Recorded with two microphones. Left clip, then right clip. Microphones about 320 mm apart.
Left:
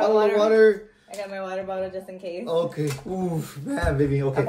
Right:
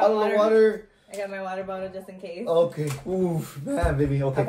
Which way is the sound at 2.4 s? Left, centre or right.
Centre.